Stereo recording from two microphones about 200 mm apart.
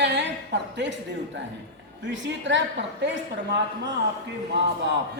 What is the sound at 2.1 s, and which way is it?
Speech, 65° right (ahead or behind).